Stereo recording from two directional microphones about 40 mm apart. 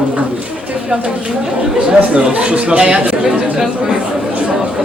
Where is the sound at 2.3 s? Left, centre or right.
Right.